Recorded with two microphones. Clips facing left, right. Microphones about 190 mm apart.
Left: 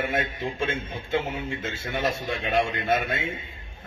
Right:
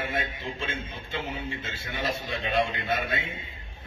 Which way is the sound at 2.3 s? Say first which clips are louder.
Right 1 dB; 55° left (ahead or behind).